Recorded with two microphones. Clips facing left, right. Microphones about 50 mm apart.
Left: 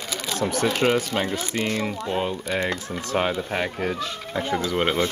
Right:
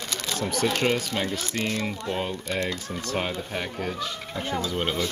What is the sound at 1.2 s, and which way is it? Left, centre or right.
Speech, left.